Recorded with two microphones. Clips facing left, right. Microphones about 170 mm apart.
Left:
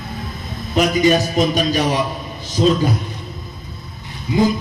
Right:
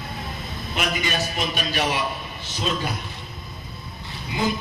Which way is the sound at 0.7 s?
35° left (ahead or behind).